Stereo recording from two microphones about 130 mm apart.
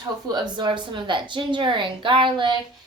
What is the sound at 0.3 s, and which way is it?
A woman's voice, 35° right (ahead or behind).